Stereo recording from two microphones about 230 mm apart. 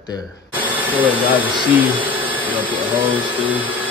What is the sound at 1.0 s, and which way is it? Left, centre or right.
Speech, centre.